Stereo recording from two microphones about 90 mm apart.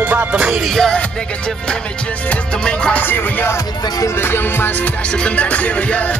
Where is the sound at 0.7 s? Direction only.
10° left (ahead or behind).